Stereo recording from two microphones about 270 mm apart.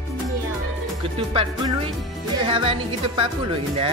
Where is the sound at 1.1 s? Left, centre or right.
Centre.